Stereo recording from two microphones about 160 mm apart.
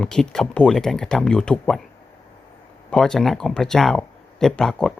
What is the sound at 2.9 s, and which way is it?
Speech, 5° left (ahead or behind).